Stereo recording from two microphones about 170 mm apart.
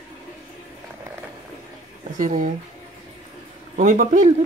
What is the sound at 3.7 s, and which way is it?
Speech, 45° right (ahead or behind).